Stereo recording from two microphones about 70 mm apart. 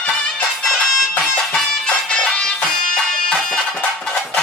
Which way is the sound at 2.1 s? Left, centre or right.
Centre.